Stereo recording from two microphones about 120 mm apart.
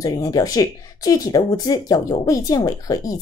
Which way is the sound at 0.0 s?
30° left (ahead or behind).